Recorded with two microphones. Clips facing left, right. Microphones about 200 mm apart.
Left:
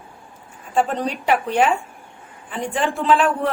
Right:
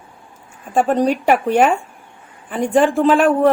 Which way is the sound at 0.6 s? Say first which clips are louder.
Right 5 dB; 50° right (ahead or behind).